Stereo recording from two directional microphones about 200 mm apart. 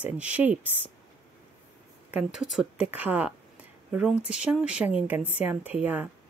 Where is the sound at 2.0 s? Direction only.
5° right (ahead or behind).